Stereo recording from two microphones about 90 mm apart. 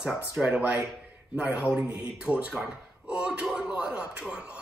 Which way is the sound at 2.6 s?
10° right (ahead or behind).